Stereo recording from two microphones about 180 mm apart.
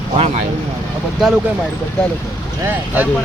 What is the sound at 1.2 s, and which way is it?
Speech, 5° right (ahead or behind).